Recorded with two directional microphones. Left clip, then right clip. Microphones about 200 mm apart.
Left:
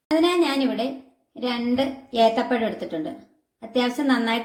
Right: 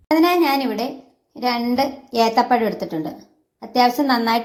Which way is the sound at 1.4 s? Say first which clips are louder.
Right 5 dB; 35° right (ahead or behind).